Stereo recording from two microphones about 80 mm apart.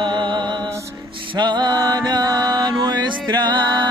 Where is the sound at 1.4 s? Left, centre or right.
Right.